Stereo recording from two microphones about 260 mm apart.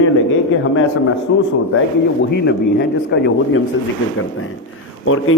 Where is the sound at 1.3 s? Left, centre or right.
Left.